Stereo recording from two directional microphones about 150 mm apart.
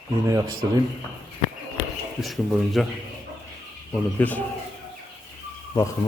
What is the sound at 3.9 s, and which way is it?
Speech, 10° left (ahead or behind).